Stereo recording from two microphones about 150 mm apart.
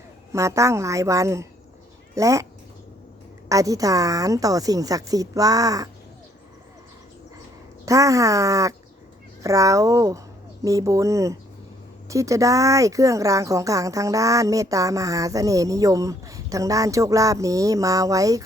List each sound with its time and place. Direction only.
0.3 s speech: 20° right (ahead or behind)
3.5 s speech: 25° right (ahead or behind)
7.9 s speech: 20° right (ahead or behind)